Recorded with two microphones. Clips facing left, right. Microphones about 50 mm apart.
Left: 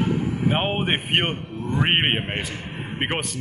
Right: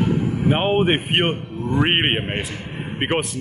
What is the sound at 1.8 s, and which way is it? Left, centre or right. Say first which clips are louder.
Speech: right 2 dB; centre.